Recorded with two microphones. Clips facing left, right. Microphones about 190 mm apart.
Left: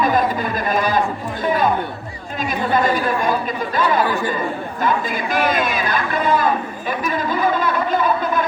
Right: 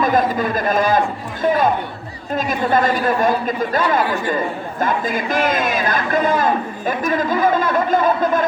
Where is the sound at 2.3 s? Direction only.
45° right (ahead or behind).